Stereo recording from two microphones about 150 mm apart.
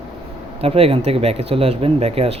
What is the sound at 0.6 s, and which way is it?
Speech, 40° right (ahead or behind).